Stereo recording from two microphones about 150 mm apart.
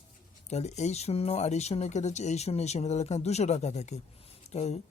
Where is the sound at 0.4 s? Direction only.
50° left (ahead or behind).